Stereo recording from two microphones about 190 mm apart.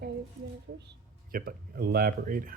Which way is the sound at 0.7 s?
65° right (ahead or behind).